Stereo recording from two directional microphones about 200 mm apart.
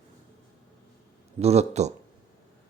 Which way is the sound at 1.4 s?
30° right (ahead or behind).